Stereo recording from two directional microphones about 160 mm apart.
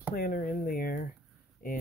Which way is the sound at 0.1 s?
65° left (ahead or behind).